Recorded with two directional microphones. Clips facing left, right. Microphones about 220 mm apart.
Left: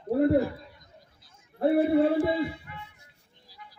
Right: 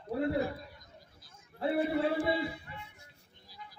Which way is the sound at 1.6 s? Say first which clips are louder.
Left 8 dB; 50° left (ahead or behind).